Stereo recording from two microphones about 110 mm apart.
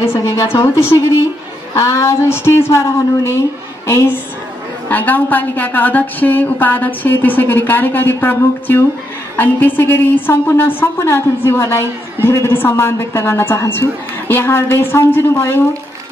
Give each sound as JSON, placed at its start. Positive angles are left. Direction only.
{"t": 0.0, "sound": "a woman's voice", "side_deg": 25}